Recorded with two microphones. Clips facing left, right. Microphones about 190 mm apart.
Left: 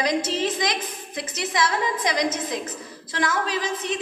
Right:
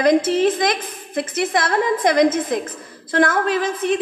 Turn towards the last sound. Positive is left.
turn(degrees=-55)  # may be behind; listen again after turning